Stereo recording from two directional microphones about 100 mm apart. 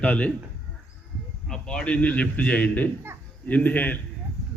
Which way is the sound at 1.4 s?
5° left (ahead or behind).